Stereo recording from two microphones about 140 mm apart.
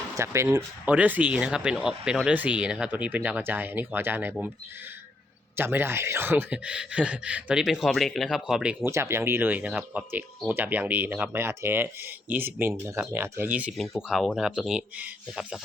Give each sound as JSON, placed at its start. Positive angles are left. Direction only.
{"t": 0.2, "sound": "speech", "side_deg": -20}
{"t": 5.5, "sound": "speech", "side_deg": -15}
{"t": 8.8, "sound": "speech", "side_deg": -20}